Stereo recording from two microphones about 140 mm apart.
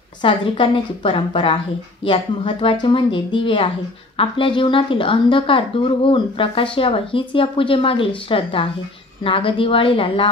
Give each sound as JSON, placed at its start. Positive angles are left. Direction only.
{"t": 0.2, "sound": "a woman's voice", "side_deg": 35}